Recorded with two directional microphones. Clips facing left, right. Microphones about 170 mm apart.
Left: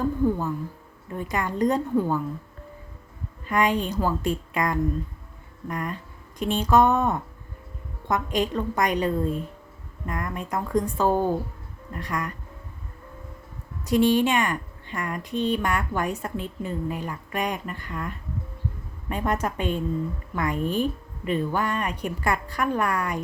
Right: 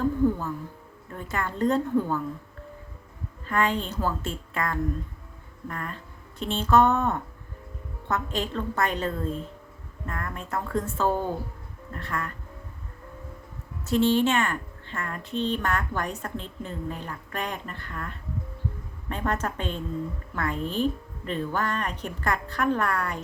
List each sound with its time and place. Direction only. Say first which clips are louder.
0.0 s speech: even; 15° left (ahead or behind)
3.4 s speech: left 3 dB; 15° left (ahead or behind)
13.8 s speech: left 2 dB; 15° left (ahead or behind)